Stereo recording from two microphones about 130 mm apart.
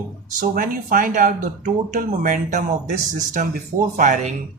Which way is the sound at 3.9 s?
75° right (ahead or behind).